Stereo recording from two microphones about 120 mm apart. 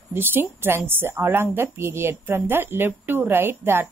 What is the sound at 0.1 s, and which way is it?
A woman's voice, 20° right (ahead or behind).